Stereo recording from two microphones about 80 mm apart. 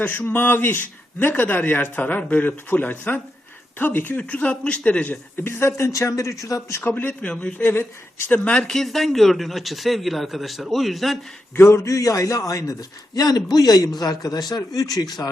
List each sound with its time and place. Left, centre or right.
0.0 s speech: left
5.4 s a man's voice: left; by 11.2 s centre
11.5 s a man's voice: left